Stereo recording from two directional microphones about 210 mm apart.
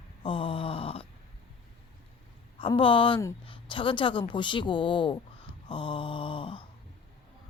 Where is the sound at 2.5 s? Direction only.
25° left (ahead or behind).